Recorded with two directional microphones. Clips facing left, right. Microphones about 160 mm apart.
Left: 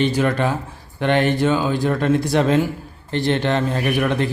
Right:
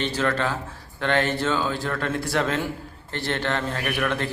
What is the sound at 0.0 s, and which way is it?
A man's voice, 15° left (ahead or behind).